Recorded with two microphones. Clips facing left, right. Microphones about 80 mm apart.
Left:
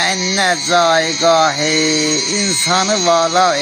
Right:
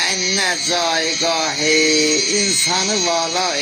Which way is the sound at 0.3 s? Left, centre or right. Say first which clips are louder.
Left 7 dB; left.